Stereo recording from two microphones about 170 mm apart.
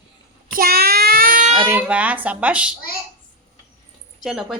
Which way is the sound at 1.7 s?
10° right (ahead or behind).